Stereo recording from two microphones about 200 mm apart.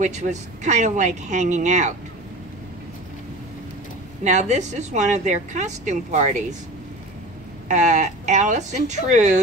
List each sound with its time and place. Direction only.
0.0 s a woman's voice: 35° right (ahead or behind)
4.2 s a woman's voice: 35° right (ahead or behind)
7.6 s a woman's voice: 35° right (ahead or behind)